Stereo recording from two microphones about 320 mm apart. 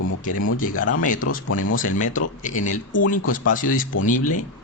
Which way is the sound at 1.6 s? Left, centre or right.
Left.